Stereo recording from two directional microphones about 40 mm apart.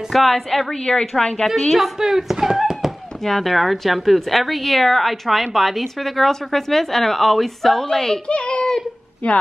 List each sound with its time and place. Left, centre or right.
0.1 s a woman's voice: centre
0.8 s a woman's voice: centre
2.0 s speech: centre
3.3 s a woman's voice: centre
8.3 s a sound: left
9.2 s speech: left